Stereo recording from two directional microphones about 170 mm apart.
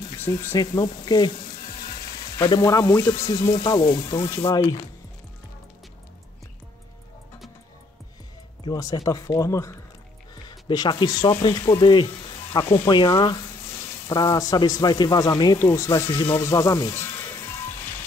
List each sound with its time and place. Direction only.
0.2 s a man's voice: 15° left (ahead or behind)
2.3 s a man's voice: 20° left (ahead or behind)
8.6 s a man's voice: 20° left (ahead or behind)